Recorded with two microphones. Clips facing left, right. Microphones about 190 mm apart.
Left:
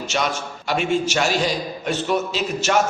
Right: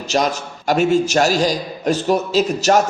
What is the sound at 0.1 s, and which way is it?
A man's voice, 40° right (ahead or behind).